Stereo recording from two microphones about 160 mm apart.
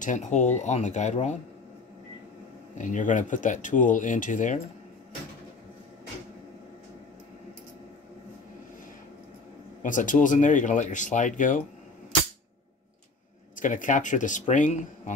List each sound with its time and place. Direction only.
0.0 s speech: 50° left (ahead or behind)
2.8 s speech: 50° left (ahead or behind)
9.8 s speech: 55° left (ahead or behind)
13.6 s speech: 55° left (ahead or behind)